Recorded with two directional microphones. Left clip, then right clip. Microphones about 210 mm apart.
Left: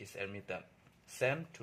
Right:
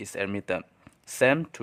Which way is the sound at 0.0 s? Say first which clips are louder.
Right 12 dB; 50° right (ahead or behind).